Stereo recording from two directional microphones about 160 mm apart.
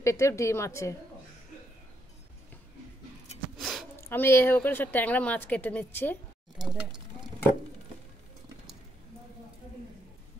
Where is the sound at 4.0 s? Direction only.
15° left (ahead or behind).